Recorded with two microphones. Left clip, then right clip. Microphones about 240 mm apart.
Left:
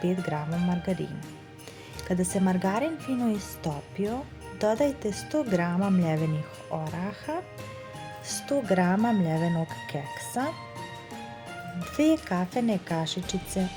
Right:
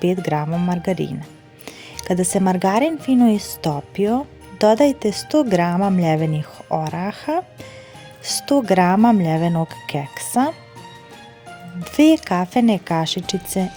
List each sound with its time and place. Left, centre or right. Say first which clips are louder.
0.0 s speech: right 10 dB; right
11.9 s speech: right 10 dB; right